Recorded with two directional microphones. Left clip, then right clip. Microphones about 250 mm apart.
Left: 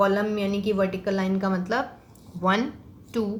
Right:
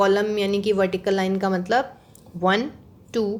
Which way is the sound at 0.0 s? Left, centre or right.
Right.